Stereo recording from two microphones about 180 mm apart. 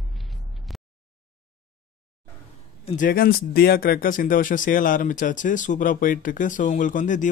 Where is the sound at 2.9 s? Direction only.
50° left (ahead or behind).